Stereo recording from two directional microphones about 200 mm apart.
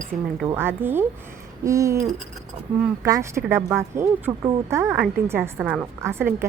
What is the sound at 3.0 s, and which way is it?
Speech, 15° right (ahead or behind).